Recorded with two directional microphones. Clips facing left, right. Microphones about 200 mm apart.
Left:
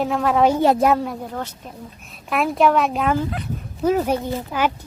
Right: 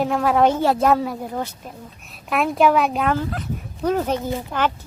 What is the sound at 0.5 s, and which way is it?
Speech, 15° left (ahead or behind).